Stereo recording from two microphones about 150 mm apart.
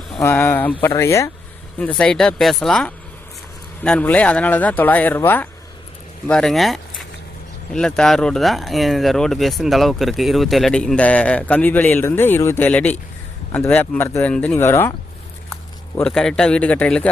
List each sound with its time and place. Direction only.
0.2 s speech: 15° left (ahead or behind)
1.8 s speech: 5° left (ahead or behind)
14.6 s speech: 15° left (ahead or behind)
16.0 s speech: 5° left (ahead or behind)